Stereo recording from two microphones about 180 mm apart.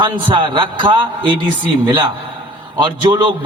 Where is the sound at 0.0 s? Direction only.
25° right (ahead or behind).